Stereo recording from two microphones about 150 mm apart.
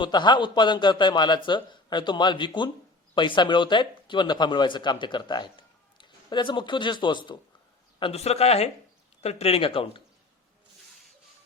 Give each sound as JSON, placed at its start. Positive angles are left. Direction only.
{"t": 0.0, "sound": "speech", "side_deg": 30}